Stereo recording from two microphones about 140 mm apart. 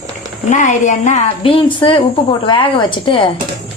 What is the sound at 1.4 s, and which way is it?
A woman's voice, 40° left (ahead or behind).